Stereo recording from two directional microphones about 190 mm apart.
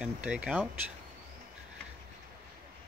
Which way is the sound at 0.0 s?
5° right (ahead or behind).